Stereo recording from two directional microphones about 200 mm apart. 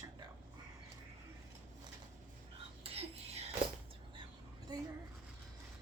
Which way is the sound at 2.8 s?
30° right (ahead or behind).